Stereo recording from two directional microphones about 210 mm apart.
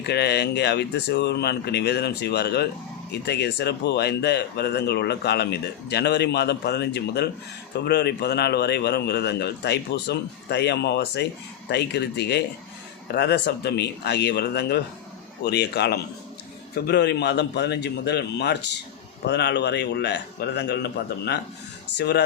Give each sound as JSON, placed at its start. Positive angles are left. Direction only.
{"t": 0.0, "sound": "speech", "side_deg": 50}